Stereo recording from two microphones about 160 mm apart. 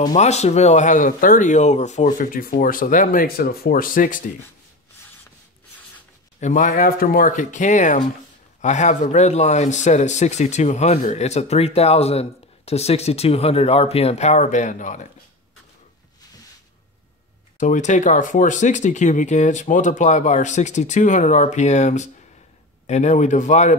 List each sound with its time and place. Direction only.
0.1 s speech: 45° left (ahead or behind)
6.4 s speech: 50° left (ahead or behind)
17.6 s speech: 50° left (ahead or behind)